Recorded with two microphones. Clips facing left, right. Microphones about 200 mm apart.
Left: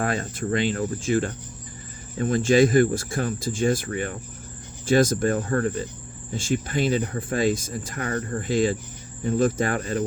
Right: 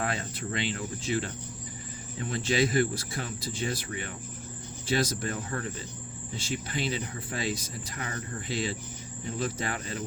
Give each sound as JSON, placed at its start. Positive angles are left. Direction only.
{"t": 0.0, "sound": "speech", "side_deg": 45}